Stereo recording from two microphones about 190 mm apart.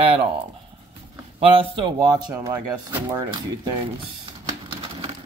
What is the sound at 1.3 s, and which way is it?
Speech, 30° right (ahead or behind).